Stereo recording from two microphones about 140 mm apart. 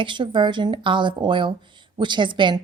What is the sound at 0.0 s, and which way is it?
A woman's voice, 35° right (ahead or behind).